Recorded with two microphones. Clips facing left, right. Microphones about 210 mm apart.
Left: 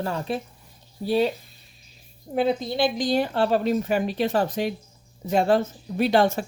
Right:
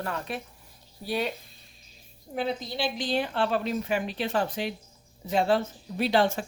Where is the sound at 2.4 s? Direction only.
50° left (ahead or behind).